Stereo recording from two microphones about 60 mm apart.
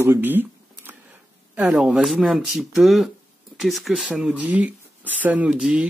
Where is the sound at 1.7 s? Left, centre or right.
Centre.